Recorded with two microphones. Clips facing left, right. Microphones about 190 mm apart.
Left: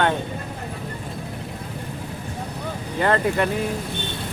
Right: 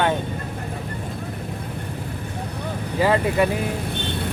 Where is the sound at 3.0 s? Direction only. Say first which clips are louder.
Right 1 dB; 5° right (ahead or behind).